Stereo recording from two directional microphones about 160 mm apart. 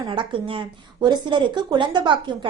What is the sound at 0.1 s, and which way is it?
A woman's voice, 30° right (ahead or behind).